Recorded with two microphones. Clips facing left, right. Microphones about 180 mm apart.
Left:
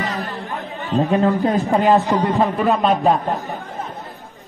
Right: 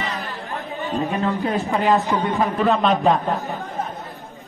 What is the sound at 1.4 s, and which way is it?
Speech, 35° left (ahead or behind).